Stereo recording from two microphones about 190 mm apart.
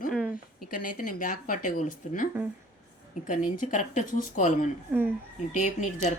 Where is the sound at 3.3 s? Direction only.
45° left (ahead or behind).